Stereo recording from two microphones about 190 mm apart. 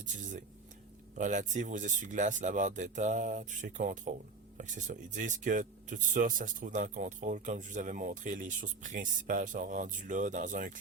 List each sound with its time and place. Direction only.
0.0 s speech: 40° right (ahead or behind)